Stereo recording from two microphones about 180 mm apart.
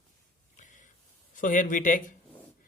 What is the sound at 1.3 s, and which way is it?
Speech, 45° left (ahead or behind).